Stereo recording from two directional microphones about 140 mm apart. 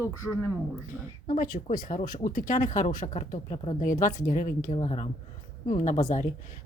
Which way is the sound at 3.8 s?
70° left (ahead or behind).